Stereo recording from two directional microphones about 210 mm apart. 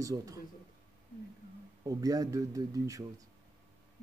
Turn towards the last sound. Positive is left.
turn(degrees=-15)  # may be behind; listen again after turning